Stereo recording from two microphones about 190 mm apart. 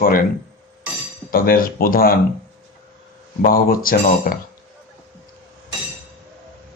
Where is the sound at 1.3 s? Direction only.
50° left (ahead or behind).